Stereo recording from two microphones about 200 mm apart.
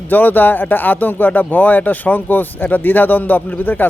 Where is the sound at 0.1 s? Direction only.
10° left (ahead or behind).